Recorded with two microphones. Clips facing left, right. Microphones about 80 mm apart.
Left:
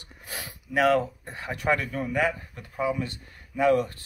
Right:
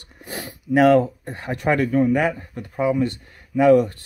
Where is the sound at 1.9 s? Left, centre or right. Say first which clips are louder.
Right 8 dB; right.